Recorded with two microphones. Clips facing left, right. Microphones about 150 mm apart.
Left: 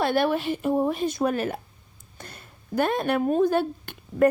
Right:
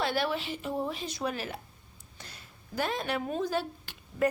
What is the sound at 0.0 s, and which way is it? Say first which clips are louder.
A woman's voice: left 7 dB; 55° left (ahead or behind).